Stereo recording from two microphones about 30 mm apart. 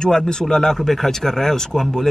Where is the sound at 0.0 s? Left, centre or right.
Left.